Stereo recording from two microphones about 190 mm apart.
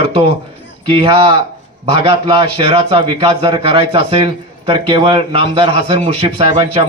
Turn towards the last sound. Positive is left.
turn(degrees=-30)  # may be behind; listen again after turning